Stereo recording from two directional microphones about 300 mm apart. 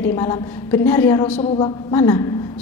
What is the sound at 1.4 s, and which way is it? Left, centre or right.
Speech, centre.